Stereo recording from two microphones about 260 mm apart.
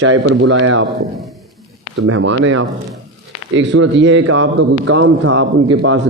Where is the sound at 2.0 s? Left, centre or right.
Right.